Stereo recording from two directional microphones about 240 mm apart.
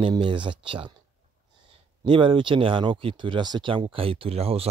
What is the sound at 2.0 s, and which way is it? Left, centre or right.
Speech, right.